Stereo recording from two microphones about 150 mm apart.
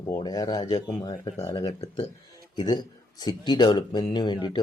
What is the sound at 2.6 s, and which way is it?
Speech, 30° left (ahead or behind).